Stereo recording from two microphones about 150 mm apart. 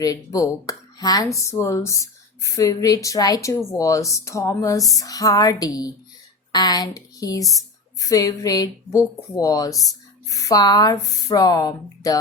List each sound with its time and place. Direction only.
0.0 s speech: 25° left (ahead or behind)